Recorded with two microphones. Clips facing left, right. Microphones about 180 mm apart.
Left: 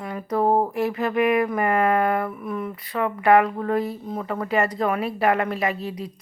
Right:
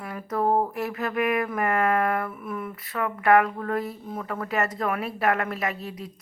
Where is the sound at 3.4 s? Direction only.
20° left (ahead or behind).